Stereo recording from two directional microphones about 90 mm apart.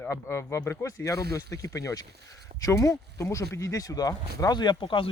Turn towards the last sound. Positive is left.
turn(degrees=65)  # may be behind; listen again after turning